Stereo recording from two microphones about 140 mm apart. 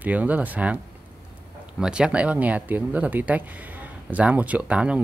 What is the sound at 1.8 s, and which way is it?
Speech, 5° right (ahead or behind).